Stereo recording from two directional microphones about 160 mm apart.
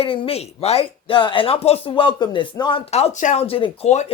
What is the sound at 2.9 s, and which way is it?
A man's voice, 45° left (ahead or behind).